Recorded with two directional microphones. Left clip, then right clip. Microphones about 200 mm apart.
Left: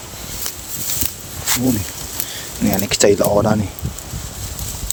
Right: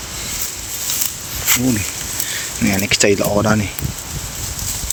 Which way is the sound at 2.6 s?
25° left (ahead or behind).